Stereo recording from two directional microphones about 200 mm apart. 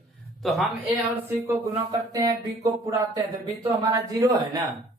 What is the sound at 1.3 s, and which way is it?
Speech, 15° right (ahead or behind).